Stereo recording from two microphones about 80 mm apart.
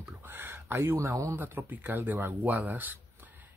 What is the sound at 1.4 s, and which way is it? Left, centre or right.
Speech, right.